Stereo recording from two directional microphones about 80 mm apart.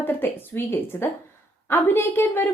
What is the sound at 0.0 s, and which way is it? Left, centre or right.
A woman's voice, left.